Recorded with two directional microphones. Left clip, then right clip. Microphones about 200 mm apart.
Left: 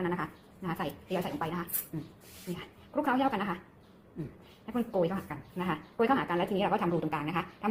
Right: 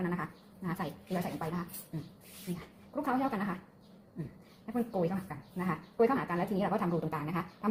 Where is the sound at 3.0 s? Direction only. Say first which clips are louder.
Left 3 dB; 15° right (ahead or behind).